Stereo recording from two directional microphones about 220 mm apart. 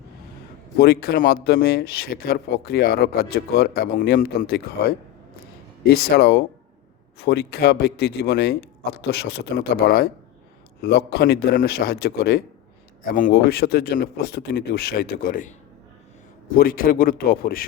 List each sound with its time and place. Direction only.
0.8 s speech: 45° left (ahead or behind)
5.9 s speech: 45° left (ahead or behind)
16.6 s speech: 40° left (ahead or behind)